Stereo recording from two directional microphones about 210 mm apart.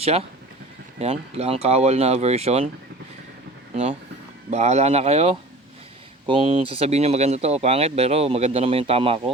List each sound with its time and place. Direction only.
0.0 s speech: 30° right (ahead or behind)
4.5 s speech: 30° right (ahead or behind)